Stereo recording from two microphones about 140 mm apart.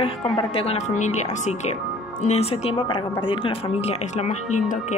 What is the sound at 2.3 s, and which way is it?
Speech, 45° left (ahead or behind).